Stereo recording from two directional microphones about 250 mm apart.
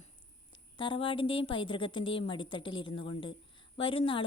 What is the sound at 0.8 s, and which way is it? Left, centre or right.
Speech, centre.